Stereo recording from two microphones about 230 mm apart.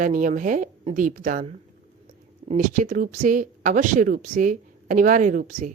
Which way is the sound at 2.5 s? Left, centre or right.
Right.